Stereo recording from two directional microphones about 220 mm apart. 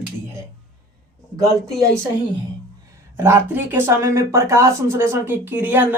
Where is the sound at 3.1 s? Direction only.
10° right (ahead or behind).